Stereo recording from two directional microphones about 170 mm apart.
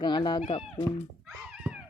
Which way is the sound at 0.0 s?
25° left (ahead or behind).